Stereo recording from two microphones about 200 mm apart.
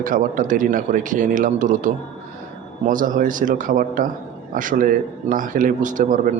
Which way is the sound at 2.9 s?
40° right (ahead or behind).